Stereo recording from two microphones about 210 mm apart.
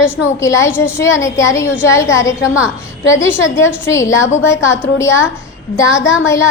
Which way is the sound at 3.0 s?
65° left (ahead or behind).